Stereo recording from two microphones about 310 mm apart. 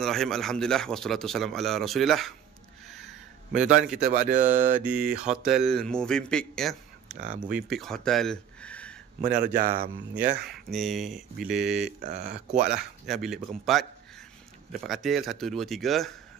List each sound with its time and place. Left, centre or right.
0.0 s speech: centre
3.5 s speech: centre
4.0 s speech: right
5.0 s speech: centre
7.2 s speech: right
7.5 s speech: centre
9.2 s speech: right
10.4 s speech: centre